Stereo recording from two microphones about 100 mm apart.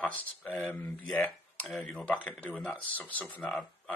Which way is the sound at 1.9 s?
15° left (ahead or behind).